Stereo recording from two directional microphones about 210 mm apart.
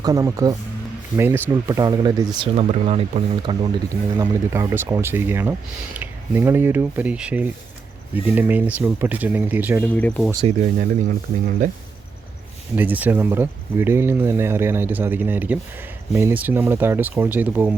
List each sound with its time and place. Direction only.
0.0 s speech: 15° right (ahead or behind)
4.2 s speech: 15° right (ahead or behind)
9.9 s speech: 5° left (ahead or behind)
10.4 s speech: 35° right (ahead or behind)
12.7 s speech: 10° right (ahead or behind)